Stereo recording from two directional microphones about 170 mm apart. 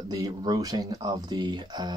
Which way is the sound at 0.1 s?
25° right (ahead or behind).